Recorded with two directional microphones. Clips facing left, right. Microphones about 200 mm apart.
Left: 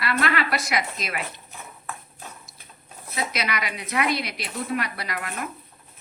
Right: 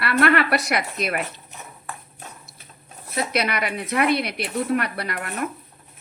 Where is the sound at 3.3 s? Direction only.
60° right (ahead or behind).